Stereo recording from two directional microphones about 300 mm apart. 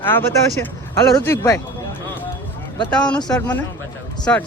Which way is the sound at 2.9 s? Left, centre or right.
Centre.